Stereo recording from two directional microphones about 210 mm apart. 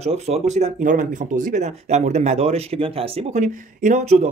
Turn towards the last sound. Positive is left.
turn(degrees=-35)  # may be behind; listen again after turning